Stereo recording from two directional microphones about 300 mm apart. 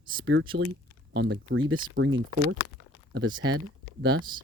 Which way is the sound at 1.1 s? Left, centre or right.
Right.